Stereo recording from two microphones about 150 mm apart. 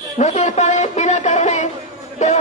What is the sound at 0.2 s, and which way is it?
Speech, 55° left (ahead or behind).